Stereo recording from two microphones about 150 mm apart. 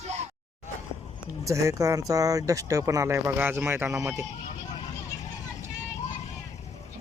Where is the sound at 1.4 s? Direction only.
20° right (ahead or behind).